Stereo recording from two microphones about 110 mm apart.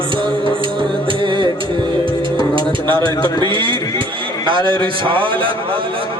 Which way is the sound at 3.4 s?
50° right (ahead or behind).